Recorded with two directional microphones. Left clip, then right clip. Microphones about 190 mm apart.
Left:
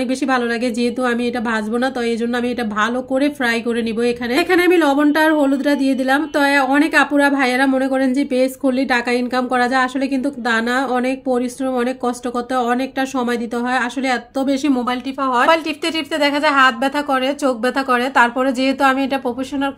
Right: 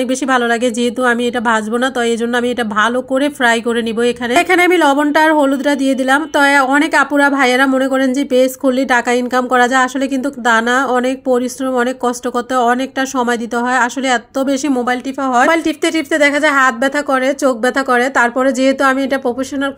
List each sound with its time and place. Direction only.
1.0 s speech: 25° right (ahead or behind)
13.3 s speech: 25° right (ahead or behind)